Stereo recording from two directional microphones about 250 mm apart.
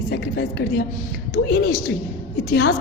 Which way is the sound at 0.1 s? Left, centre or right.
Left.